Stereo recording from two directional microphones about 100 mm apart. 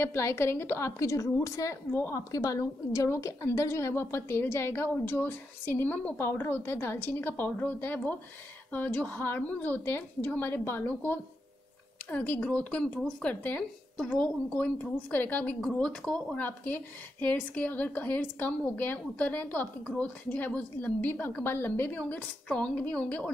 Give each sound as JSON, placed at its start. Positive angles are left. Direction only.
{"t": 0.0, "sound": "a woman's voice", "side_deg": 25}
{"t": 2.3, "sound": "a woman's voice", "side_deg": 35}